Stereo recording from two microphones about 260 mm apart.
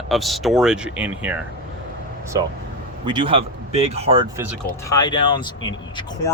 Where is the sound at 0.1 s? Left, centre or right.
Centre; by 4.3 s right.